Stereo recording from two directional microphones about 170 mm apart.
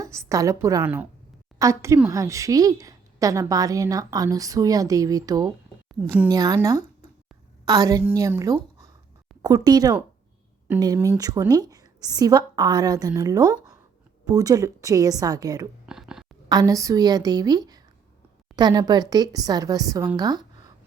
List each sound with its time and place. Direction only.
0.0 s a woman's voice: 15° right (ahead or behind)
15.9 s a sound: 5° right (ahead or behind)
16.5 s a woman's voice: 20° right (ahead or behind)